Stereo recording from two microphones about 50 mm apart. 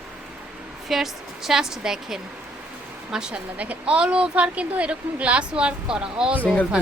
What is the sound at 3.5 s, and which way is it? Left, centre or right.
Speech, right.